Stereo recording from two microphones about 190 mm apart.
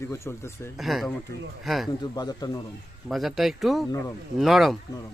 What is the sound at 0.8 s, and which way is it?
A man's voice, centre (ahead or behind).